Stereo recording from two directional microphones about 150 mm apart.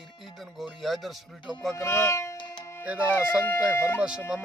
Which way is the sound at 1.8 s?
15° left (ahead or behind).